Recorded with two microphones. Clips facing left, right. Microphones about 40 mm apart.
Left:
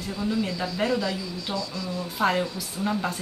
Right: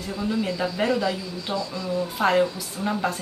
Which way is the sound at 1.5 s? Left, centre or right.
Right.